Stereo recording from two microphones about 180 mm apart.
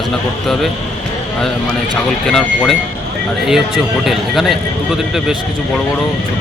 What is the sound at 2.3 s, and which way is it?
Speech, centre (ahead or behind).